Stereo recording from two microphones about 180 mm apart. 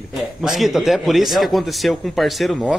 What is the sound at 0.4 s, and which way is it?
Speech, centre (ahead or behind).